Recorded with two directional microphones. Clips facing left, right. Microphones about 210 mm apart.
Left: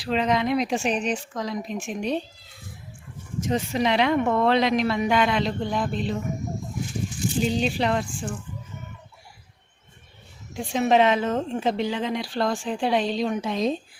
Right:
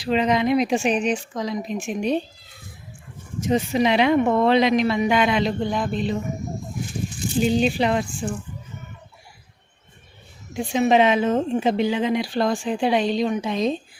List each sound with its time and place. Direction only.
0.0 s speech: centre (ahead or behind)
3.4 s speech: 5° right (ahead or behind)
7.4 s speech: 5° right (ahead or behind)
10.5 s speech: 5° right (ahead or behind)